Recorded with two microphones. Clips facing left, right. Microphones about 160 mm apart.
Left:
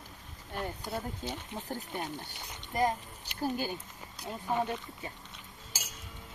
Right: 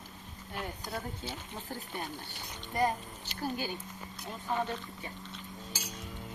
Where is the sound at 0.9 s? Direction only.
20° left (ahead or behind).